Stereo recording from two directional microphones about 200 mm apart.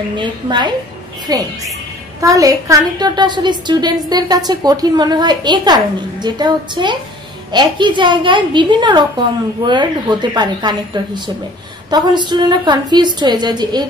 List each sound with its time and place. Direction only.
0.2 s a woman's voice: 20° right (ahead or behind)